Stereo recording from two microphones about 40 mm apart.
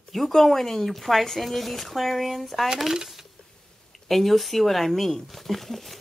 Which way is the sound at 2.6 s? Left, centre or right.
Centre.